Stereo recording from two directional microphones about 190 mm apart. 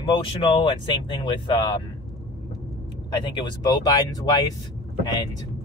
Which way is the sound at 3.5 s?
20° left (ahead or behind).